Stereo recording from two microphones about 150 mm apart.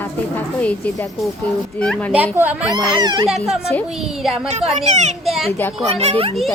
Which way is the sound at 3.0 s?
30° right (ahead or behind).